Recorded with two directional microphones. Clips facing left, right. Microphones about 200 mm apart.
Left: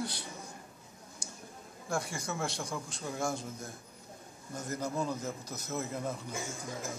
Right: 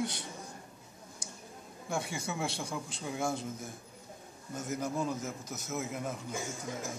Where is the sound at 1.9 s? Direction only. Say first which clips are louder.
Even; centre (ahead or behind).